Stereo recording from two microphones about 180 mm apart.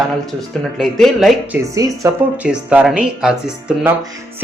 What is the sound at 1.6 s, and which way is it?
Speech, 15° right (ahead or behind).